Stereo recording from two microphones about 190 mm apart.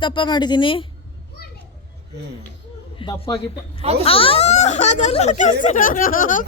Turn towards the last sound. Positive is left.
turn(degrees=45)  # may be behind; listen again after turning